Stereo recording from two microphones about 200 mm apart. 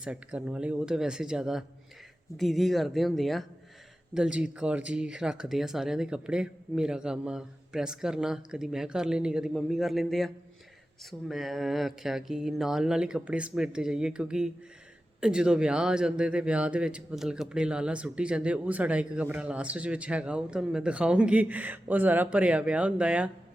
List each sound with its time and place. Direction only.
0.0 s speech: 5° right (ahead or behind)